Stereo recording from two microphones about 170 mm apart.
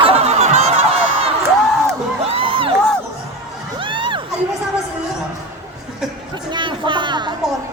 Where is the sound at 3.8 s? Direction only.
30° right (ahead or behind).